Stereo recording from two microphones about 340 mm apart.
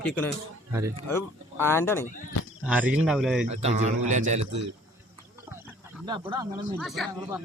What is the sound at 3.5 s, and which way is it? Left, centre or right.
A man's voice, centre.